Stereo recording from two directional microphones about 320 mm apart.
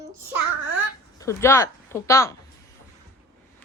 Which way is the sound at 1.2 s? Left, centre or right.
Centre.